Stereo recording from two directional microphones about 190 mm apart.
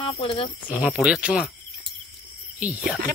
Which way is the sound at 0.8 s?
5° right (ahead or behind).